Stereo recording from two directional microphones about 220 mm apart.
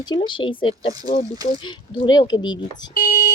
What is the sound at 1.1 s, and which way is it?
Speech, 45° left (ahead or behind).